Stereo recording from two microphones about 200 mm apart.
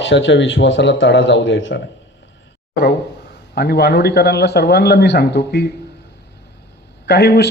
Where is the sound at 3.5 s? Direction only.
55° left (ahead or behind).